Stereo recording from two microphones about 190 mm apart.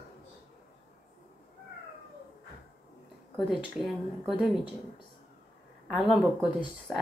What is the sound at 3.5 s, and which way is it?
Speech, centre (ahead or behind).